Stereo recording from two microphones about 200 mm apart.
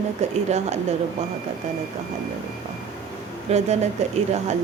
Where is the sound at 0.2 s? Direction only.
35° right (ahead or behind).